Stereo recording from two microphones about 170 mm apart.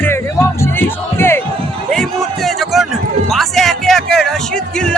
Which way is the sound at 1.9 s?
Centre (ahead or behind).